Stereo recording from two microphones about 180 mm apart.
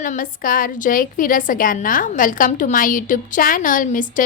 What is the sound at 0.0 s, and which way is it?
A woman's voice, 50° left (ahead or behind).